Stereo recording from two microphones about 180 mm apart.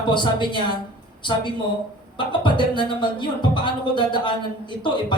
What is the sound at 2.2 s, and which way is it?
Speech, 25° left (ahead or behind).